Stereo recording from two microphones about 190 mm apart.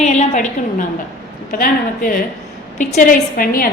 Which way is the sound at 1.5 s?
45° left (ahead or behind).